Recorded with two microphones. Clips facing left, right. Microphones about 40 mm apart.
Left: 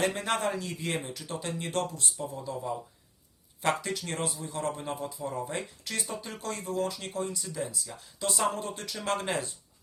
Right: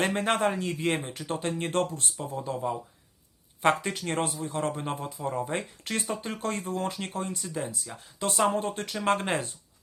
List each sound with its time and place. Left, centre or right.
0.0 s speech: right